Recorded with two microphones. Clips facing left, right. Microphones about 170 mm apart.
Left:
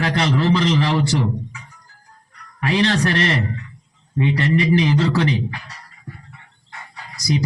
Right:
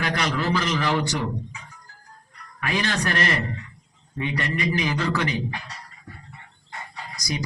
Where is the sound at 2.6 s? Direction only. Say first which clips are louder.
Left 7 dB; 30° left (ahead or behind).